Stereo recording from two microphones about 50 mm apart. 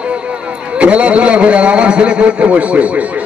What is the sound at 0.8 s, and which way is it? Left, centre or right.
A man's voice, right.